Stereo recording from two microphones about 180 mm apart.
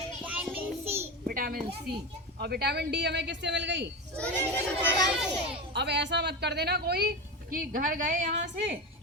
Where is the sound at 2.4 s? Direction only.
60° right (ahead or behind).